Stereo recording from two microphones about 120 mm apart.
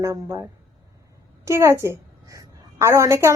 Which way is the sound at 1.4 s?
25° right (ahead or behind).